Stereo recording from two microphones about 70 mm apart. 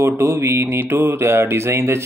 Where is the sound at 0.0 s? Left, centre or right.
Right.